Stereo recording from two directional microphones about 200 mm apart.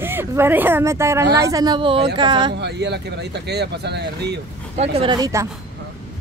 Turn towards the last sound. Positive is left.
turn(degrees=-15)  # may be behind; listen again after turning